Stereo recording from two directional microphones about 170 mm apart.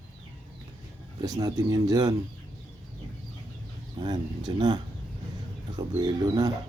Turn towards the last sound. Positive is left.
turn(degrees=-25)  # may be behind; listen again after turning